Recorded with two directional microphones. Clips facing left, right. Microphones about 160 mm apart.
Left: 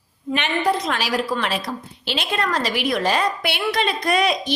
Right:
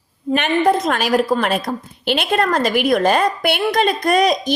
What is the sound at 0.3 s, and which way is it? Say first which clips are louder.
A woman's voice: right 5 dB; 50° right (ahead or behind).